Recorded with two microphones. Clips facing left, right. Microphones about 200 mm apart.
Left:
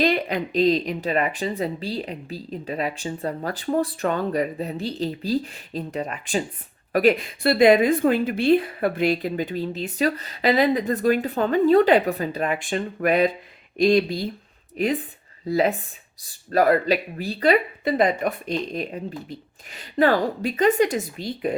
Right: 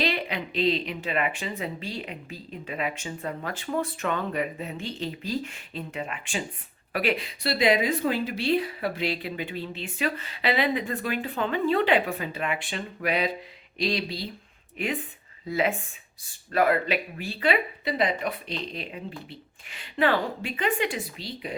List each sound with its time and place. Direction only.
0.0 s a woman's voice: 45° left (ahead or behind)